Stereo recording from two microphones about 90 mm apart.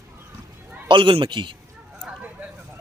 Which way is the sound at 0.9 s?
65° right (ahead or behind).